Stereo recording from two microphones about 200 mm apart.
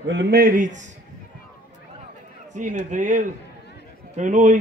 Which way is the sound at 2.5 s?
40° right (ahead or behind).